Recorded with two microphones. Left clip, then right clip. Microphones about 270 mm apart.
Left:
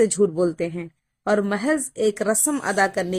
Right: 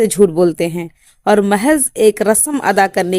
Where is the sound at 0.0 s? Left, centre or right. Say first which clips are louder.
Right 8 dB; right.